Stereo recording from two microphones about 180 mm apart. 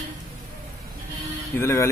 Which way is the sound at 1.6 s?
15° left (ahead or behind).